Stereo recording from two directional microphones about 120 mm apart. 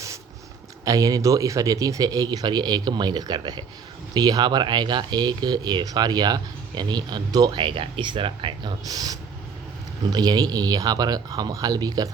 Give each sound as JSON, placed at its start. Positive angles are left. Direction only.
{"t": 0.9, "sound": "speech", "side_deg": -30}
{"t": 8.8, "sound": "speech", "side_deg": -30}